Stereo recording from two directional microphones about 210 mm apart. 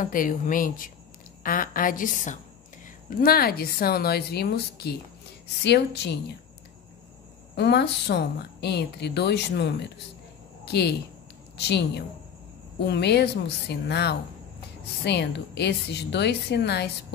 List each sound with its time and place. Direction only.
0.0 s a woman's voice: 40° left (ahead or behind)
7.5 s a woman's voice: 55° left (ahead or behind)